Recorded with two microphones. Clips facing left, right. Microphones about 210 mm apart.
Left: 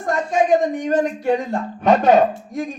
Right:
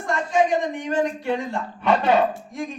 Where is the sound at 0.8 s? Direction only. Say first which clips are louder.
Left 4 dB; 45° left (ahead or behind).